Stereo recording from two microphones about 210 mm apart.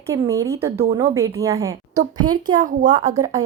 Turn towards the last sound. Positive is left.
turn(degrees=-15)  # may be behind; listen again after turning